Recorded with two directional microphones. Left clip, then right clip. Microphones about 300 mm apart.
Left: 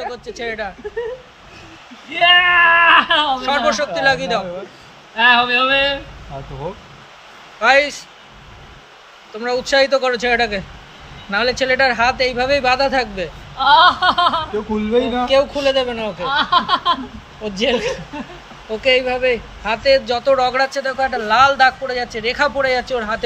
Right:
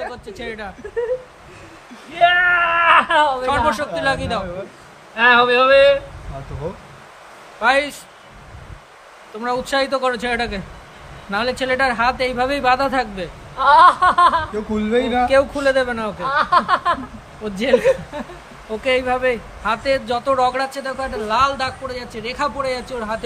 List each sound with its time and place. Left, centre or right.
0.0 s speech: centre
2.1 s speech: centre
7.6 s speech: centre
9.3 s speech: centre
13.6 s speech: right
13.8 s speech: centre